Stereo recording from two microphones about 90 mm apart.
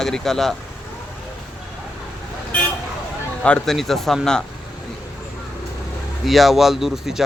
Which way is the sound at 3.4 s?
5° left (ahead or behind).